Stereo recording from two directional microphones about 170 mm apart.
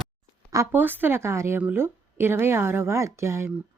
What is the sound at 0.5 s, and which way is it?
A woman's voice, 15° right (ahead or behind).